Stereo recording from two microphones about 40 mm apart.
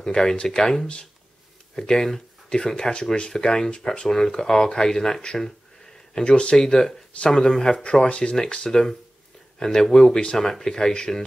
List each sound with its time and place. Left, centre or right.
0.0 s speech: centre
5.2 s speech: left
10.3 s speech: centre